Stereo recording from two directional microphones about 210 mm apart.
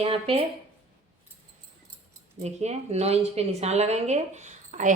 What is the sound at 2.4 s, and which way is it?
A woman's voice, 30° right (ahead or behind).